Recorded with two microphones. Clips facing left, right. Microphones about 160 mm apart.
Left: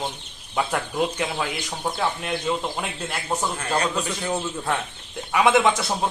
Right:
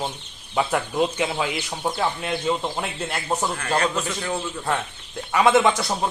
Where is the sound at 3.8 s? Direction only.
20° left (ahead or behind).